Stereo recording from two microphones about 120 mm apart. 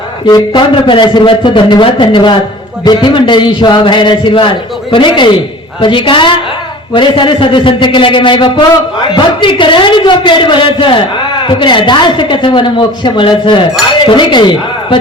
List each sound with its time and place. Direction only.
0.3 s a man's voice: 40° left (ahead or behind)